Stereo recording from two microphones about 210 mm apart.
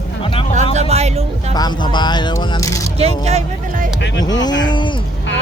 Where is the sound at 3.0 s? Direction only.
30° right (ahead or behind).